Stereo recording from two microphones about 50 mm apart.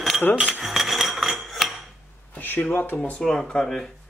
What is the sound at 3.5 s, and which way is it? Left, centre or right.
Speech, centre.